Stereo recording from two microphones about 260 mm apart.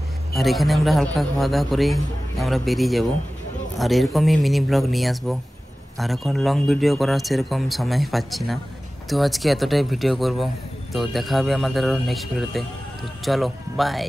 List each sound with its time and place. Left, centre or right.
0.4 s speech: centre